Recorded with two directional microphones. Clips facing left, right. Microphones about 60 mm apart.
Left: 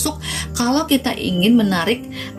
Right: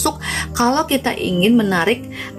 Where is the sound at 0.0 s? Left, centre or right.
Right.